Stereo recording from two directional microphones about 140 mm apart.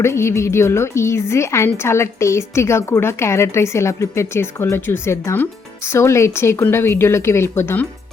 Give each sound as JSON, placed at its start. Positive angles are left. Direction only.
{"t": 0.0, "sound": "a woman's voice", "side_deg": 20}